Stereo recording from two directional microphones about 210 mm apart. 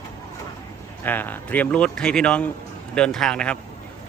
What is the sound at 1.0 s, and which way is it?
Speech, 10° left (ahead or behind).